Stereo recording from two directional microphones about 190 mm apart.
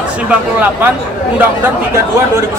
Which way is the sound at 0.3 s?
10° right (ahead or behind).